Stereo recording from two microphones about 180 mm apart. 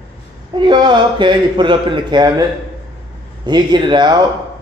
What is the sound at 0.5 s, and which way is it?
Speech, 25° right (ahead or behind).